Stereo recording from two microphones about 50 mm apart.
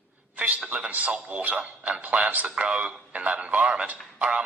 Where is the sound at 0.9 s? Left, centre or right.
Right.